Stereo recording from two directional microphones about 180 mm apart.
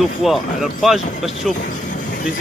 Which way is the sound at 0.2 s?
Centre (ahead or behind).